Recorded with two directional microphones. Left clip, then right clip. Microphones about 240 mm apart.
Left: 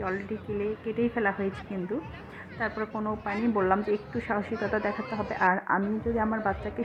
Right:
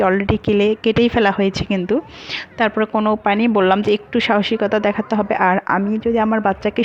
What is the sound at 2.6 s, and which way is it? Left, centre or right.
A woman's voice, right.